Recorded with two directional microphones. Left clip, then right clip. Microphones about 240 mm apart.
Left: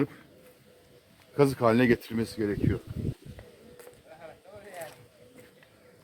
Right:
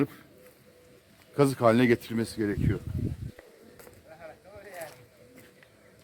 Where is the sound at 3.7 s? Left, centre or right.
Centre.